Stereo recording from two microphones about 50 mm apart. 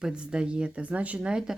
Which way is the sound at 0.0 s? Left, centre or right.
Centre.